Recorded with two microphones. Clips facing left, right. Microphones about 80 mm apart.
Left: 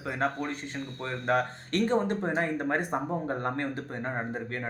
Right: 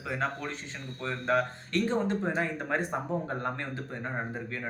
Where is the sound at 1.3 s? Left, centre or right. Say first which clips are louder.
Even; left.